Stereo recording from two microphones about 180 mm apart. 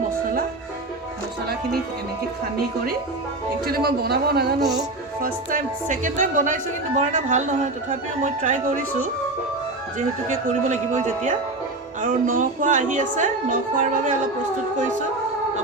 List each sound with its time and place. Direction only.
3.7 s a man's voice: 60° right (ahead or behind)
5.2 s a woman's voice: 50° right (ahead or behind)
10.2 s a woman's voice: 40° right (ahead or behind)